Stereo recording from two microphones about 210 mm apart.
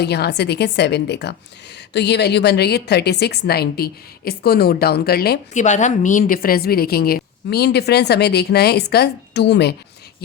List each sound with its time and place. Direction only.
0.0 s a woman's voice: 50° left (ahead or behind)
5.5 s a woman's voice: 35° left (ahead or behind); by 9.7 s 50° left (ahead or behind)